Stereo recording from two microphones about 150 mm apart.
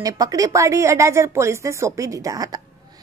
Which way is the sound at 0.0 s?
25° right (ahead or behind).